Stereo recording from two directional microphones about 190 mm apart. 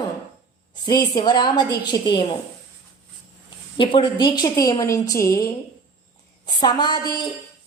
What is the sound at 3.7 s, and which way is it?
A woman's voice, 25° left (ahead or behind).